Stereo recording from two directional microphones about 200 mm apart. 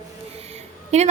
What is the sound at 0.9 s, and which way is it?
Speech, 35° right (ahead or behind).